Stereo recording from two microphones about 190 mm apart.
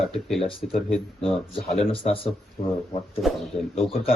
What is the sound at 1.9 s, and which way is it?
Speech, 30° left (ahead or behind).